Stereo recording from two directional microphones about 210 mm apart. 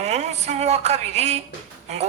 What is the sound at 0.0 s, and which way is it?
A woman's voice, 30° right (ahead or behind).